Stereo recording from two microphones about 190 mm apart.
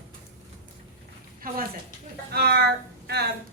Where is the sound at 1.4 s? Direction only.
50° right (ahead or behind).